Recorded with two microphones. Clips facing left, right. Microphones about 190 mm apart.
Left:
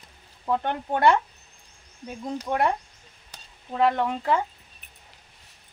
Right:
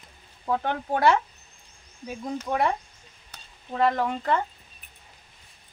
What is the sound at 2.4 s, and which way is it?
Speech, centre (ahead or behind).